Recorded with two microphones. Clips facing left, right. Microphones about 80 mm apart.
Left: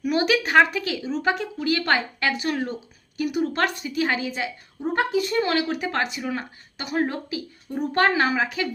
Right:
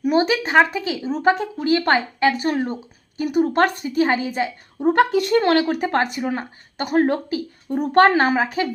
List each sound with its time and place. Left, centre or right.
0.0 s a woman's voice: right
1.0 s a woman's voice: right
4.8 s a woman's voice: right